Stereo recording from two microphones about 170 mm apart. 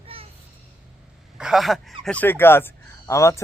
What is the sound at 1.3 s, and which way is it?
A man's voice, 5° right (ahead or behind).